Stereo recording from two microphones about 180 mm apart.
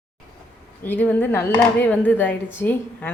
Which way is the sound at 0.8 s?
10° left (ahead or behind).